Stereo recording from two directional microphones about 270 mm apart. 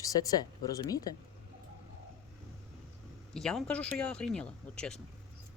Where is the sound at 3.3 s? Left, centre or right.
Centre.